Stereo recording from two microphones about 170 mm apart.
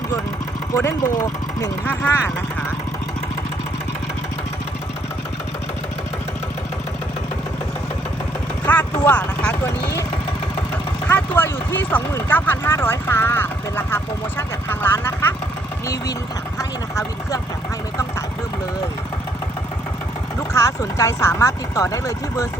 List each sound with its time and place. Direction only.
0.8 s speech: 15° left (ahead or behind)
8.6 s a sound: 10° left (ahead or behind)
9.0 s speech: 5° left (ahead or behind)
11.1 s speech: 10° left (ahead or behind)
16.6 s speech: 15° left (ahead or behind)
20.5 s speech: 15° left (ahead or behind)